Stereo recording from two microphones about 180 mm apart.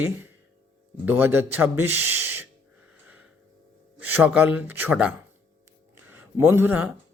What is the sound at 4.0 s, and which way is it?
Speech, 10° right (ahead or behind).